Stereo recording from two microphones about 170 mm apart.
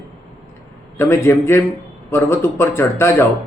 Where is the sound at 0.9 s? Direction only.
15° left (ahead or behind).